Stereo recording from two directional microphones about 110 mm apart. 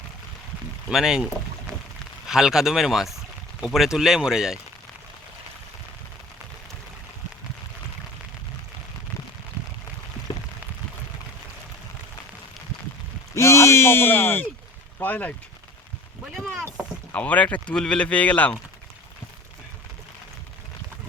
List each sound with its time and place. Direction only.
0.9 s speech: 5° right (ahead or behind)
13.3 s a sound: 25° left (ahead or behind)
14.9 s speech: 15° left (ahead or behind)
16.3 s rowboat: centre (ahead or behind)
17.1 s speech: 15° left (ahead or behind)